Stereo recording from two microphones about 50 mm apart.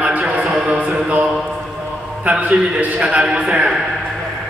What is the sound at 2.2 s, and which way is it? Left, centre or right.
A man's voice, right.